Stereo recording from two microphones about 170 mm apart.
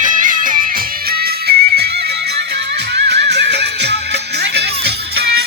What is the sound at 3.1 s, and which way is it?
Music, 85° right.